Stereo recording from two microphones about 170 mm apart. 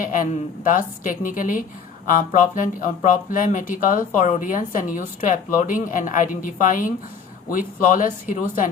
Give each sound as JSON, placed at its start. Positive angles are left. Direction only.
{"t": 0.0, "sound": "speech", "side_deg": 50}